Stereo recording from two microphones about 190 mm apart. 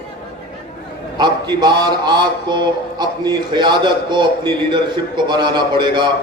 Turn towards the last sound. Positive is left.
turn(degrees=-25)  # may be behind; listen again after turning